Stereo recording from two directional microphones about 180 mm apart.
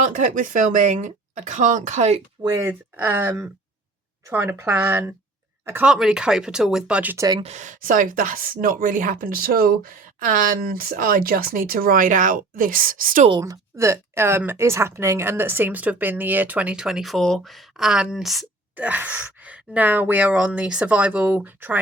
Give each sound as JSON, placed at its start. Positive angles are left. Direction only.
{"t": 0.0, "sound": "speech", "side_deg": -45}
{"t": 2.4, "sound": "a woman's voice", "side_deg": -15}
{"t": 7.3, "sound": "speech", "side_deg": -25}
{"t": 7.5, "sound": "speech", "side_deg": -45}
{"t": 13.4, "sound": "a woman's voice", "side_deg": -15}